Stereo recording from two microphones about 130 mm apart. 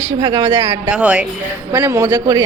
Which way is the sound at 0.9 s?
10° right (ahead or behind).